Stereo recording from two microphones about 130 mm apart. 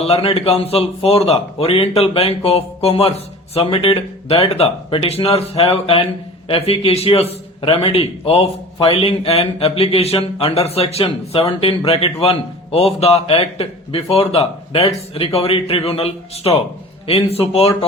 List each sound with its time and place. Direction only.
0.0 s a man's voice: 50° left (ahead or behind)